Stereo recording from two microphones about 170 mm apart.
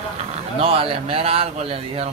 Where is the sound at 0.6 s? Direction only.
35° right (ahead or behind).